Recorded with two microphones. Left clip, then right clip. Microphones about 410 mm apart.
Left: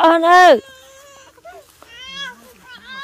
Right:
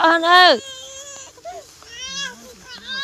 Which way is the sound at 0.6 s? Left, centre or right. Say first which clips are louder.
Right 7 dB; centre.